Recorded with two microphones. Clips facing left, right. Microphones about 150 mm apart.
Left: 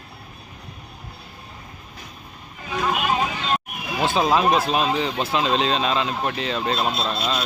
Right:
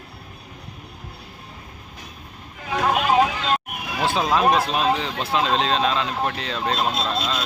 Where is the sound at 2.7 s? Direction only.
65° right (ahead or behind).